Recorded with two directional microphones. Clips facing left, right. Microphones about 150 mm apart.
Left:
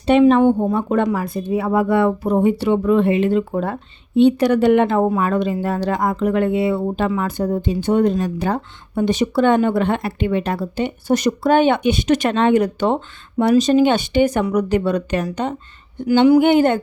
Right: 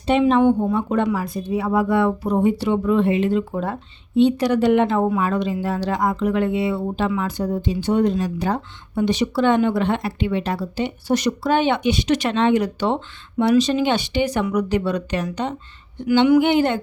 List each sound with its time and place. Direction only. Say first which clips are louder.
0.0 s speech: left 4 dB; 55° left (ahead or behind)